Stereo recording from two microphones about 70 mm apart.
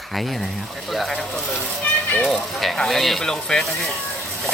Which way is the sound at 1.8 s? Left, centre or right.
Left.